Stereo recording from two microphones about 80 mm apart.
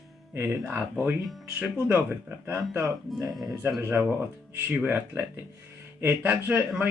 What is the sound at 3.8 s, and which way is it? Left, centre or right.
Speech, right.